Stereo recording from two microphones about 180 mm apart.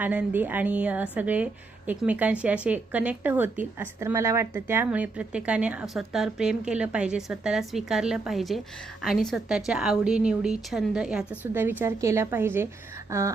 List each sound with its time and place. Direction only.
0.0 s a woman's voice: 10° right (ahead or behind)